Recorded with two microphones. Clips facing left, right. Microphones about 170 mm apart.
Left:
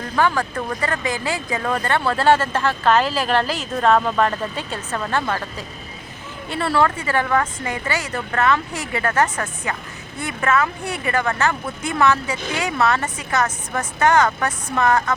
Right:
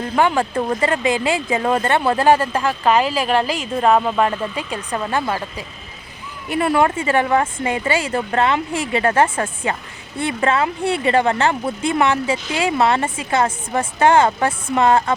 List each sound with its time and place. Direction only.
0.2 s speech: 25° right (ahead or behind)